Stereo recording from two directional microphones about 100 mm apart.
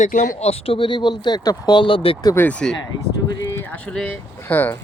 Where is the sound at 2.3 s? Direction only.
20° left (ahead or behind).